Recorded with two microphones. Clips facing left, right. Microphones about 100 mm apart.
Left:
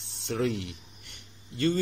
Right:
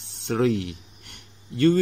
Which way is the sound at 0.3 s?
60° right (ahead or behind).